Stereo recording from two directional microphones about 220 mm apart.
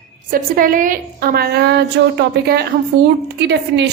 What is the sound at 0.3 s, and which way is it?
A woman's voice, 40° right (ahead or behind).